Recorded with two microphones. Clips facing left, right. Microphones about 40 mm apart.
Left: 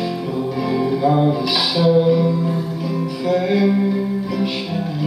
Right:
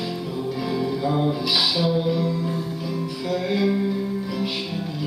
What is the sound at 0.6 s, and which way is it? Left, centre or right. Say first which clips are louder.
Music: left 7 dB; centre.